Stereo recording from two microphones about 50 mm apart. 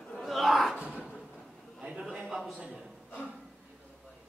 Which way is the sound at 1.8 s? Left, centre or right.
Centre.